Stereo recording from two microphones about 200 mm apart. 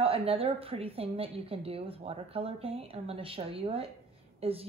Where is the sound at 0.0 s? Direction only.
30° right (ahead or behind).